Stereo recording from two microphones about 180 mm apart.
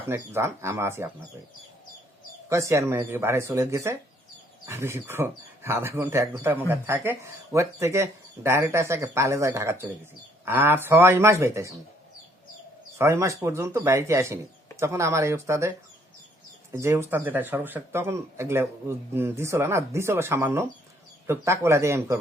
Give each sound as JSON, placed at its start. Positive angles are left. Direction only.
{"t": 0.1, "sound": "speech", "side_deg": -15}
{"t": 2.5, "sound": "speech", "side_deg": -15}
{"t": 13.0, "sound": "speech", "side_deg": -15}
{"t": 16.7, "sound": "speech", "side_deg": -15}